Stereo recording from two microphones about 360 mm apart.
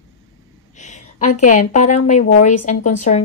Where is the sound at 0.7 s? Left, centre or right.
Centre.